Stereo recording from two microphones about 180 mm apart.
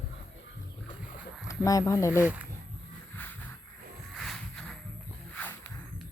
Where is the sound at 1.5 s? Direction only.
20° left (ahead or behind).